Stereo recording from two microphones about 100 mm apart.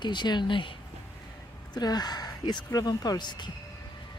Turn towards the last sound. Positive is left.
turn(degrees=50)  # may be behind; listen again after turning